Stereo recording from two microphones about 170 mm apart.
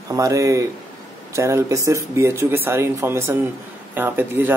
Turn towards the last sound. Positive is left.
turn(degrees=-10)  # may be behind; listen again after turning